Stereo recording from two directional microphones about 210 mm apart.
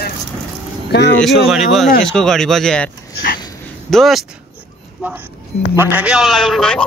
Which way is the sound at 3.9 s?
Centre (ahead or behind).